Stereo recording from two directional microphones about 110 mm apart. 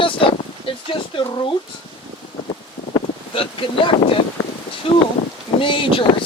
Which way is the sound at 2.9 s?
55° left (ahead or behind).